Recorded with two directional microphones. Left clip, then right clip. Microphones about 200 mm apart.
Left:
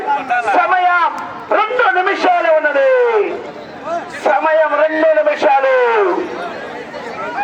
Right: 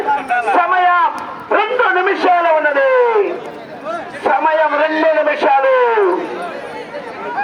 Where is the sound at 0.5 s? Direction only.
30° left (ahead or behind).